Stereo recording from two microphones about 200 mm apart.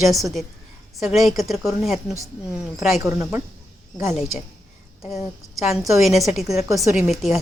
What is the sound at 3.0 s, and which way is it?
Speech, 15° right (ahead or behind).